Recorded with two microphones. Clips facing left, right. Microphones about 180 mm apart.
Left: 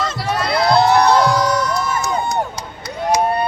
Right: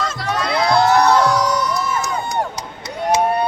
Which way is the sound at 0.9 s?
15° left (ahead or behind).